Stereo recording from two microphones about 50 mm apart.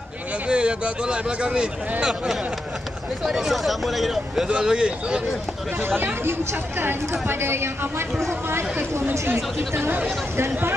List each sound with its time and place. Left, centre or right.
0.5 s speech: right
3.3 s speech: centre
4.5 s speech: centre
5.8 s speech: right